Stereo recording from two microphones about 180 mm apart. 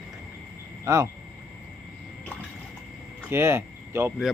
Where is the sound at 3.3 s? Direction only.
15° right (ahead or behind).